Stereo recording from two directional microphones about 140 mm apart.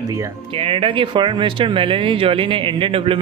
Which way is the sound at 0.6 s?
40° right (ahead or behind).